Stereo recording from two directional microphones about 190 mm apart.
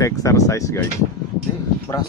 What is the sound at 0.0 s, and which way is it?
Speech, 15° left (ahead or behind).